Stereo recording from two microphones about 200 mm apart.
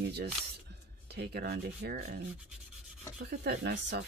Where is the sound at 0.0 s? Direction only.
55° right (ahead or behind).